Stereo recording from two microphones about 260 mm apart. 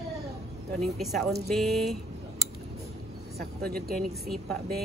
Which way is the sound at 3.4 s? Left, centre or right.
Right.